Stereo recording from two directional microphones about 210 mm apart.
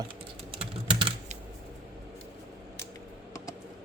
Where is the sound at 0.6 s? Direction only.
25° right (ahead or behind).